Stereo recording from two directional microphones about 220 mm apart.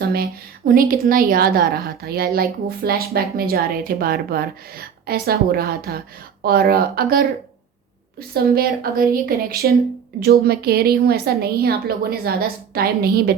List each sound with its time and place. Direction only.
0.0 s a woman's voice: 45° right (ahead or behind)
8.3 s a woman's voice: 45° right (ahead or behind)